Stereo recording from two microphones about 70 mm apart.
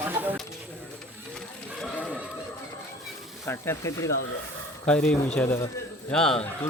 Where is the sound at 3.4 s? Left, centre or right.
Left.